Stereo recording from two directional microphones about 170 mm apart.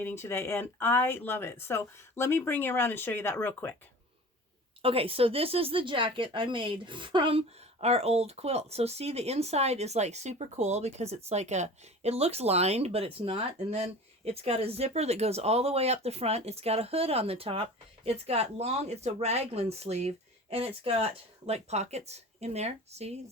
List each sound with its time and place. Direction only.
0.0 s speech: 15° left (ahead or behind)
4.8 s speech: 35° right (ahead or behind)